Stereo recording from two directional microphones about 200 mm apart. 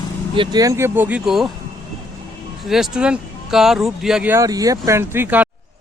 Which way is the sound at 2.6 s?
Centre (ahead or behind).